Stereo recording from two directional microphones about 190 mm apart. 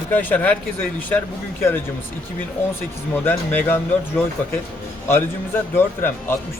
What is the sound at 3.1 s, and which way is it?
Speech, 10° left (ahead or behind).